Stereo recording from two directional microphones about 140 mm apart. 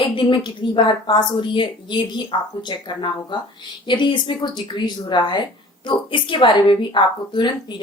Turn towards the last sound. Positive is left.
turn(degrees=35)  # may be behind; listen again after turning